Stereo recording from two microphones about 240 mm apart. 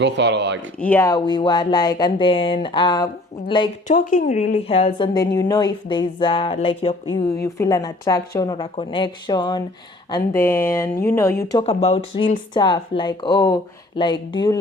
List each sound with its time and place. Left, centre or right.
0.0 s speech: right
0.8 s speech: centre
3.8 s a woman's voice: left
7.4 s speech: centre
11.6 s a woman's voice: left